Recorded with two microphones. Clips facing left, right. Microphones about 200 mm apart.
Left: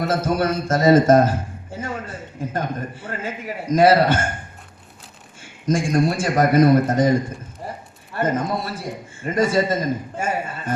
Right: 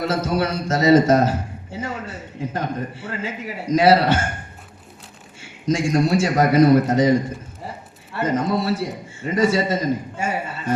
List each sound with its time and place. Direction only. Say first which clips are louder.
0.0 s a man's voice: left 1 dB; 50° left (ahead or behind)
5.4 s a man's voice: even; 50° left (ahead or behind)
8.1 s a man's voice: right 1 dB; 50° left (ahead or behind)